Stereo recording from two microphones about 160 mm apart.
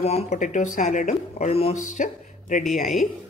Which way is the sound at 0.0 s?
45° left (ahead or behind).